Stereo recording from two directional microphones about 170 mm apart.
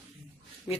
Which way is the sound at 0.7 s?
5° right (ahead or behind).